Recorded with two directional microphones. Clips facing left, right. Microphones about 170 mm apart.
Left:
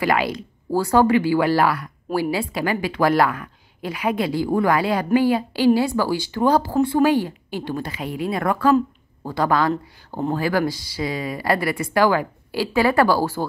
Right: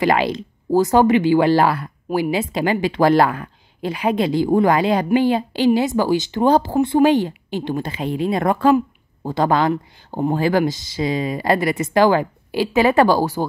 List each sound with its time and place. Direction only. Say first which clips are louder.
0.0 s a woman's voice: right 3 dB; 25° right (ahead or behind)